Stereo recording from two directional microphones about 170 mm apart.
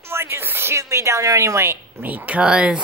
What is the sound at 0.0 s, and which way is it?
A woman's voice, 15° right (ahead or behind).